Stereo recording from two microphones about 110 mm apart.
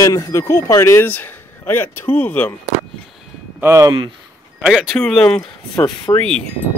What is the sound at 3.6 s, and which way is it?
Speech, 25° right (ahead or behind).